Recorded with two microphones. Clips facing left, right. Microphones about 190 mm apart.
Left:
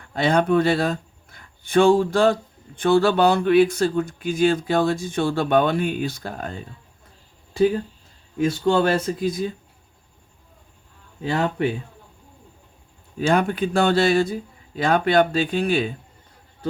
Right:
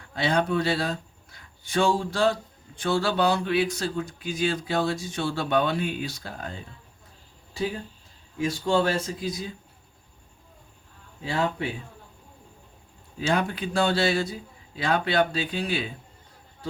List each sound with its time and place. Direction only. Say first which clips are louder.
0.1 s speech: left 6 dB; 55° left (ahead or behind)
8.4 s speech: left 5 dB; 60° left (ahead or behind)
11.2 s speech: left 5 dB; 60° left (ahead or behind)
13.1 s speech: left 6 dB; 50° left (ahead or behind)